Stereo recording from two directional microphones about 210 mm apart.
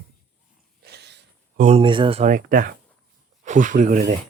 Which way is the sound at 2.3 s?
40° right (ahead or behind).